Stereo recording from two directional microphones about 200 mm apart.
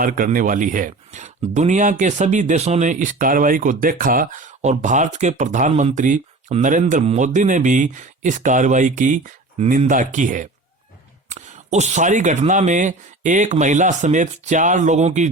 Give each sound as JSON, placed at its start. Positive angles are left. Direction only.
{"t": 0.0, "sound": "speech", "side_deg": -45}